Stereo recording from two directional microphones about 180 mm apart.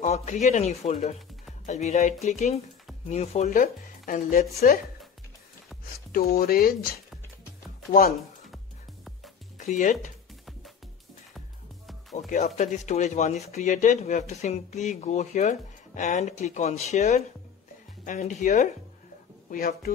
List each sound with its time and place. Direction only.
0.0 s speech: 40° left (ahead or behind)
3.5 s speech: 50° left (ahead or behind)
6.1 s speech: 60° left (ahead or behind)
9.6 s speech: 45° left (ahead or behind)
12.3 s speech: 40° left (ahead or behind)
19.5 s speech: 55° left (ahead or behind)